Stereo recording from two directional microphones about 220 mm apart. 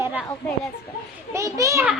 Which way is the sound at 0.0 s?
5° right (ahead or behind).